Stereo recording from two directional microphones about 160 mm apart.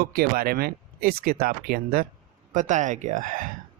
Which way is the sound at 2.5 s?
50° right (ahead or behind).